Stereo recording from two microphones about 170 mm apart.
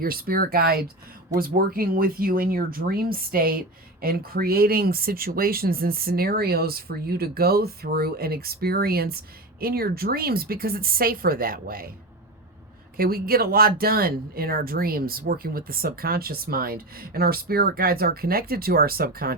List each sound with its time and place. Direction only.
0.0 s speech: 60° right (ahead or behind)
13.0 s speech: 60° right (ahead or behind)